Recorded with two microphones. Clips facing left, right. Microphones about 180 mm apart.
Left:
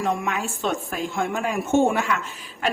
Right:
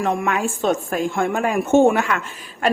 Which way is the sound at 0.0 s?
50° right (ahead or behind).